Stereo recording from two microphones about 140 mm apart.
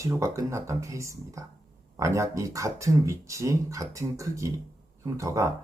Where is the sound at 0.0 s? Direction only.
20° right (ahead or behind).